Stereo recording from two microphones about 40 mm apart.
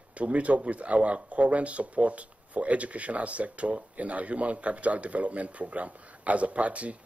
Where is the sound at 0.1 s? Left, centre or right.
Right.